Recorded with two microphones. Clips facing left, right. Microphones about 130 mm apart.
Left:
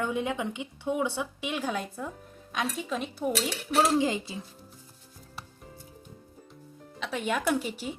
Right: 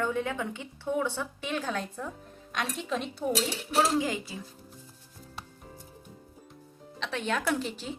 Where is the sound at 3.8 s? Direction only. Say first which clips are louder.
Left 2 dB; 25° left (ahead or behind).